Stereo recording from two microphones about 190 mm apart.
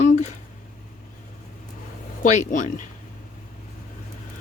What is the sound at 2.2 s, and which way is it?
Speech, 40° left (ahead or behind).